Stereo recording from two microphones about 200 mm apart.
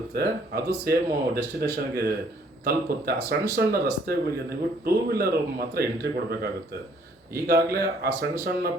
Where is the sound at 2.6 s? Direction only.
50° right (ahead or behind).